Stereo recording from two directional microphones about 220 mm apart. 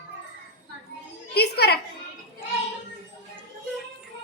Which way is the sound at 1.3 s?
45° left (ahead or behind).